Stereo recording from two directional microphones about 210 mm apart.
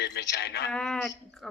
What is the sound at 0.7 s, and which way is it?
Speech, 5° left (ahead or behind).